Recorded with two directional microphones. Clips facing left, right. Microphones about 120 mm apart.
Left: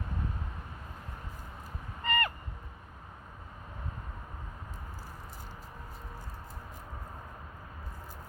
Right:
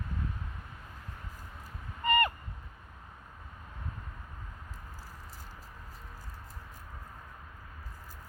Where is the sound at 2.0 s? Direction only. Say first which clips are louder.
Right 4 dB; 20° right (ahead or behind).